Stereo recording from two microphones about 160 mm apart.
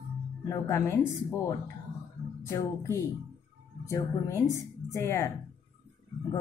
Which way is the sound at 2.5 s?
20° left (ahead or behind).